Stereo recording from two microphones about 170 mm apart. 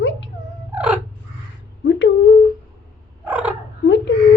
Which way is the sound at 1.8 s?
90° left.